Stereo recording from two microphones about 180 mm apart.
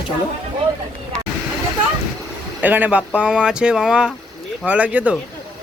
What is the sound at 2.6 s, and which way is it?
Speech, 10° right (ahead or behind).